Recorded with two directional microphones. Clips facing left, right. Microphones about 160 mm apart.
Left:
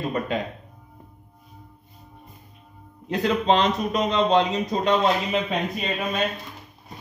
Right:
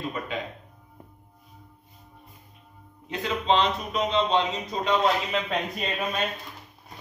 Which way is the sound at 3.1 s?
45° left (ahead or behind).